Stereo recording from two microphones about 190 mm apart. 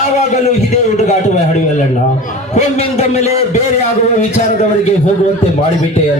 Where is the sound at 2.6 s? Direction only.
35° left (ahead or behind).